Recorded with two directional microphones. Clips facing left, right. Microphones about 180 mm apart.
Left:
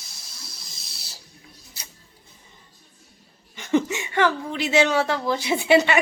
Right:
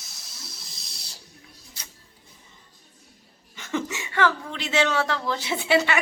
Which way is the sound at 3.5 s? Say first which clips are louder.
Left 7 dB; 15° left (ahead or behind).